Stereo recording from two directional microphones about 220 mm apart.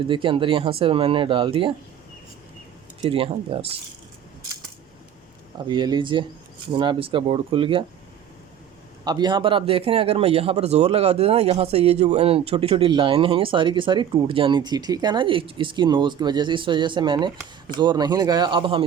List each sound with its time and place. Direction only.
0.1 s a man's voice: 20° right (ahead or behind)
3.0 s a man's voice: 25° right (ahead or behind)
5.5 s a man's voice: 20° right (ahead or behind)
9.0 s a man's voice: 20° right (ahead or behind)